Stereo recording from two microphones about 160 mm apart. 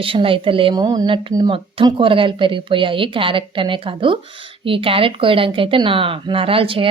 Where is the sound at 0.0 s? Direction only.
35° right (ahead or behind).